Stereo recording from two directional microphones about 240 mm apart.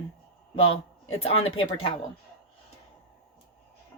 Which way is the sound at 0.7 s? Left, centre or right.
Left.